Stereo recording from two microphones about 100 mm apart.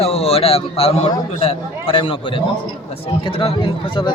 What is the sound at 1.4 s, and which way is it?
A man's voice, 65° left (ahead or behind).